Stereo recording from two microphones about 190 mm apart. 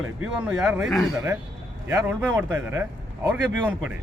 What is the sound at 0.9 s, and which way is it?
Speech, 20° left (ahead or behind).